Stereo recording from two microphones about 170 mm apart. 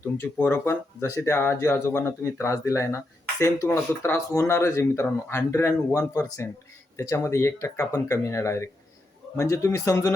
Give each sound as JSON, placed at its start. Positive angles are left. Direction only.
{"t": 0.2, "sound": "speech", "side_deg": 10}